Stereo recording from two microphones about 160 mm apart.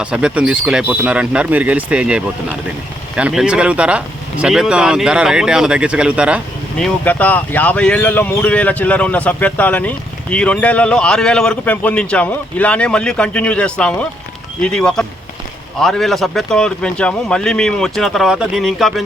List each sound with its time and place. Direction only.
0.0 s speech: 5° right (ahead or behind)
6.8 s speech: 10° left (ahead or behind)